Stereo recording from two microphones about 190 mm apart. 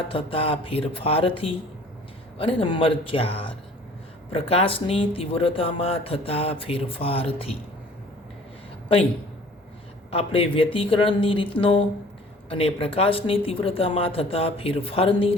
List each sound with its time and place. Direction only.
0.1 s speech: 30° left (ahead or behind)
10.1 s speech: 30° left (ahead or behind)